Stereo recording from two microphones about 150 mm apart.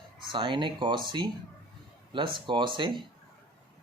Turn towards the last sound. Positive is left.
turn(degrees=-30)  # may be behind; listen again after turning